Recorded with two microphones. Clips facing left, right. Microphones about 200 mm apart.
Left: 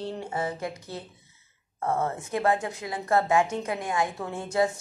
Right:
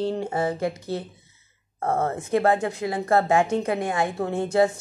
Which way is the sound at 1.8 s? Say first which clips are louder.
Right 3 dB; 50° right (ahead or behind).